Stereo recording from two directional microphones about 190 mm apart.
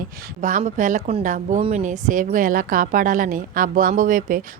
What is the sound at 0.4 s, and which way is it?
A woman's voice, 40° right (ahead or behind).